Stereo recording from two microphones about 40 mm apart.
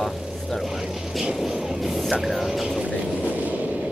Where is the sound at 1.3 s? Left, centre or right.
Centre.